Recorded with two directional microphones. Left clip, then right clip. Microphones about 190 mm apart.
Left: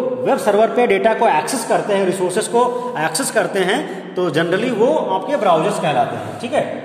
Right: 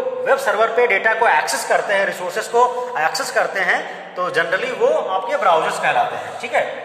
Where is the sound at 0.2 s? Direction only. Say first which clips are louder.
Left 1 dB; 35° left (ahead or behind).